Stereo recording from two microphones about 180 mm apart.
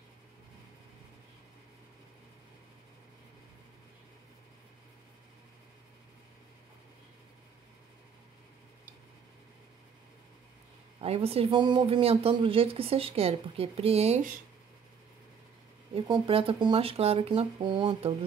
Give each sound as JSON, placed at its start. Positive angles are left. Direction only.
{"t": 11.0, "sound": "speech", "side_deg": -35}
{"t": 15.9, "sound": "speech", "side_deg": -30}